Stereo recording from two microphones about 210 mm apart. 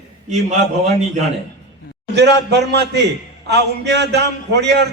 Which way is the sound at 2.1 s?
55° right (ahead or behind).